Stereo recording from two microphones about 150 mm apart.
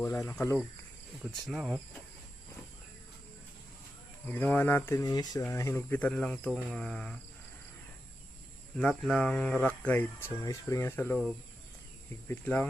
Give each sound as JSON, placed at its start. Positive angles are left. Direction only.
{"t": 0.0, "sound": "speech", "side_deg": 15}
{"t": 1.2, "sound": "speech", "side_deg": -5}
{"t": 4.3, "sound": "speech", "side_deg": 10}
{"t": 8.8, "sound": "speech", "side_deg": 5}
{"t": 12.3, "sound": "speech", "side_deg": 10}